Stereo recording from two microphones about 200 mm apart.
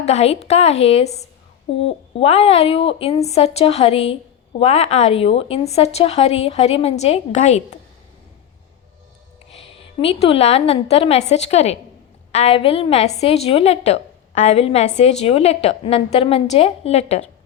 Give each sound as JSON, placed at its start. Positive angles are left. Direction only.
{"t": 0.0, "sound": "a woman's voice", "side_deg": 30}
{"t": 9.5, "sound": "a woman's voice", "side_deg": 30}